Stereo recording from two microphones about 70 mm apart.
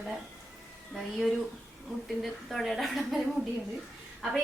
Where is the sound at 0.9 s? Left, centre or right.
Centre.